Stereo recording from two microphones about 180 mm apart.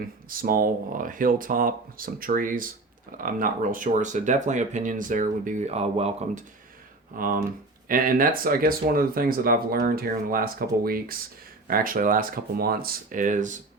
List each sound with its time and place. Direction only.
0.3 s speech: 50° right (ahead or behind); by 6.4 s 35° right (ahead or behind)
7.1 s speech: 50° right (ahead or behind)